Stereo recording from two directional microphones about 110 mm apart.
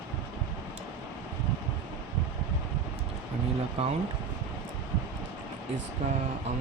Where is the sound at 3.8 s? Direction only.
70° right (ahead or behind).